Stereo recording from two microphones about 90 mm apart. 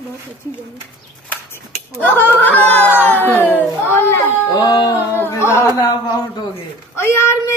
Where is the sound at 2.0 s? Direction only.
20° left (ahead or behind).